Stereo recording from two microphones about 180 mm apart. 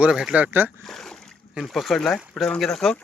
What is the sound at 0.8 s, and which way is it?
Speech, centre (ahead or behind).